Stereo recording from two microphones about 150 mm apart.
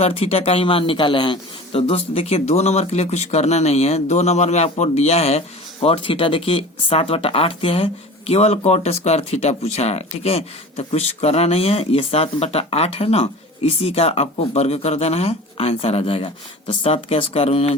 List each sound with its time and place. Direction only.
0.0 s speech: 40° left (ahead or behind)